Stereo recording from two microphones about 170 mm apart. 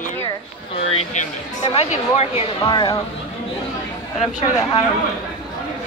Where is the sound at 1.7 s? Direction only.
40° left (ahead or behind).